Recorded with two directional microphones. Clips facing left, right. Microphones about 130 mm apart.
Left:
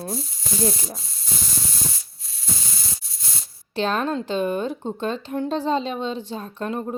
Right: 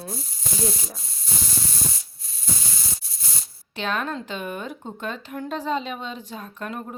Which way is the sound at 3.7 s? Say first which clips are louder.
Left 5 dB; 35° left (ahead or behind).